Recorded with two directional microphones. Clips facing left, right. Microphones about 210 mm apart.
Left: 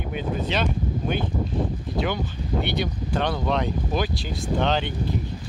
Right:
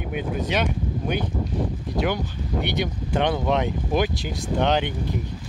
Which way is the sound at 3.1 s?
15° right (ahead or behind).